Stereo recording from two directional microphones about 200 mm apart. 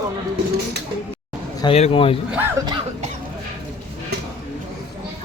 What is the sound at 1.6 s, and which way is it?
Speech, 30° left (ahead or behind).